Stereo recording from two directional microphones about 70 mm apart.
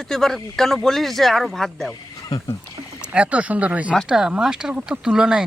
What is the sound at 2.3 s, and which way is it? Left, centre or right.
Speech, left.